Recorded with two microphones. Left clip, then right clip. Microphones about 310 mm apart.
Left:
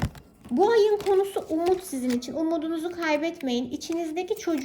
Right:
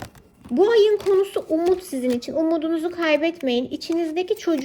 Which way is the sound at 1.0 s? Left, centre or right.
Centre.